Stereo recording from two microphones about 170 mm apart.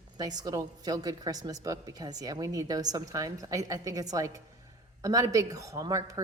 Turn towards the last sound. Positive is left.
turn(degrees=-20)  # may be behind; listen again after turning